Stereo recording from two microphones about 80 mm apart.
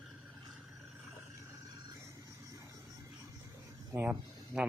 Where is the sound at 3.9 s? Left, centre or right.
Centre.